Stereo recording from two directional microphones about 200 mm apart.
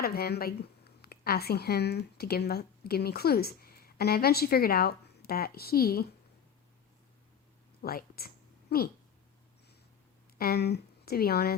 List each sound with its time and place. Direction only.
0.0 s speech: 50° left (ahead or behind)
7.8 s speech: 50° left (ahead or behind)
10.3 s speech: 50° left (ahead or behind)